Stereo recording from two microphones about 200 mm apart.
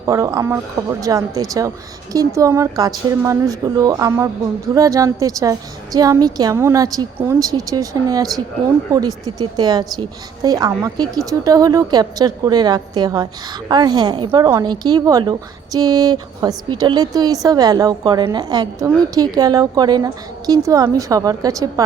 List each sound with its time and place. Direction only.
0.0 s a woman's voice: 15° right (ahead or behind)